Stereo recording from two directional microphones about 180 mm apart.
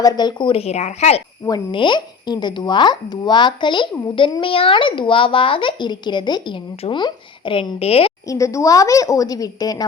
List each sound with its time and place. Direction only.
0.0 s speech: 25° left (ahead or behind)
1.5 s speech: 25° left (ahead or behind)
8.3 s speech: 15° left (ahead or behind)